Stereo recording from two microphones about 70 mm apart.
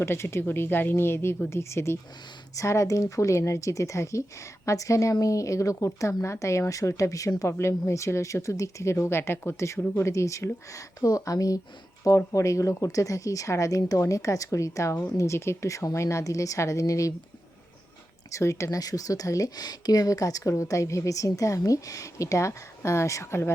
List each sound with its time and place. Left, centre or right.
0.0 s speech: left
2.6 s speech: left
18.3 s speech: left